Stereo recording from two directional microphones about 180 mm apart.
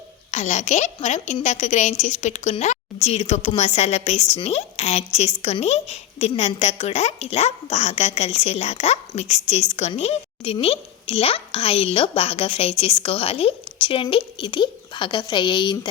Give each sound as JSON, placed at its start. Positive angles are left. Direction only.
{"t": 0.3, "sound": "a woman's voice", "side_deg": 40}